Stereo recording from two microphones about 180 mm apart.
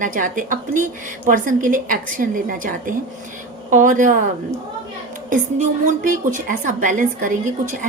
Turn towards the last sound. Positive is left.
turn(degrees=-45)  # may be behind; listen again after turning